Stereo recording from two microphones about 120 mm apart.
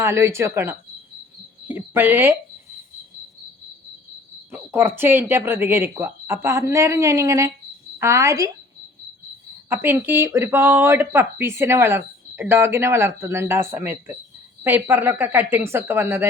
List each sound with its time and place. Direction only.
0.0 s speech: 20° right (ahead or behind)
4.5 s speech: 20° right (ahead or behind)
9.6 s speech: 20° right (ahead or behind)